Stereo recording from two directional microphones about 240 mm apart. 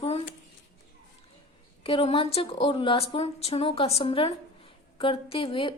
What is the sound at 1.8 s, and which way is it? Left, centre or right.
A woman's voice, left.